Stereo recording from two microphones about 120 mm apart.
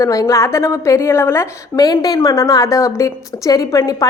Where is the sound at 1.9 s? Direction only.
30° left (ahead or behind).